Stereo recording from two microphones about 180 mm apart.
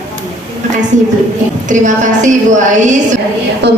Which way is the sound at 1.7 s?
45° right (ahead or behind).